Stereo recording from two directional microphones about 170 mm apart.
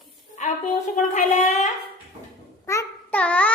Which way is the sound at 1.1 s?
45° left (ahead or behind).